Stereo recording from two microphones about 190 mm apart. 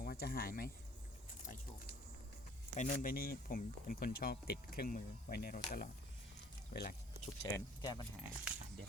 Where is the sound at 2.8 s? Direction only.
45° left (ahead or behind).